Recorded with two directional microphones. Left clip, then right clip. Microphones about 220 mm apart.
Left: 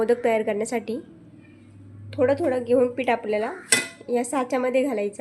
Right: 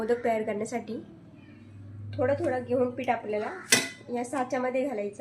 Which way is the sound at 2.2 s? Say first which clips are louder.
Left 6 dB; 50° left (ahead or behind).